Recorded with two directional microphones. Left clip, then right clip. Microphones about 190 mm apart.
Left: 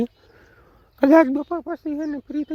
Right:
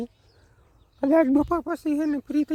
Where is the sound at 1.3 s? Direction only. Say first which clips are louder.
Right 3 dB; 30° right (ahead or behind).